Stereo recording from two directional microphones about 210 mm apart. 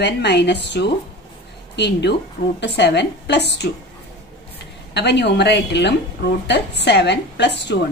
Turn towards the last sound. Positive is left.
turn(degrees=55)  # may be behind; listen again after turning